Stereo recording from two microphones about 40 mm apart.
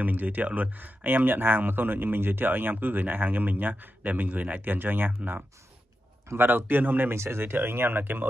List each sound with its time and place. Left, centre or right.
0.0 s speech: right
4.6 s speech: right
7.1 s speech: right
7.5 s speech: right